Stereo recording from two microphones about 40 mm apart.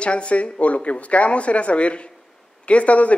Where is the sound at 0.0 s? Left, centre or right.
Left.